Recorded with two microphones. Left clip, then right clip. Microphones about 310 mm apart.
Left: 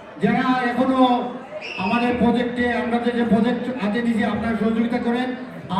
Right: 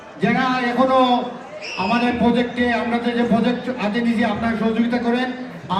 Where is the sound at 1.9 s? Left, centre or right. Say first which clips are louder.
Right 1 dB; centre.